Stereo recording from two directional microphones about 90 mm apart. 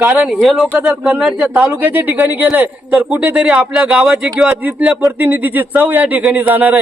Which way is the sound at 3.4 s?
5° right (ahead or behind).